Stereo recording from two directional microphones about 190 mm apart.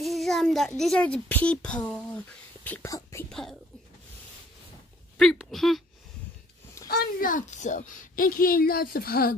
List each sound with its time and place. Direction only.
0.0 s a child's voice: centre (ahead or behind)
3.3 s speech: centre (ahead or behind)
5.1 s speech: centre (ahead or behind)
6.9 s a woman's voice: 50° left (ahead or behind)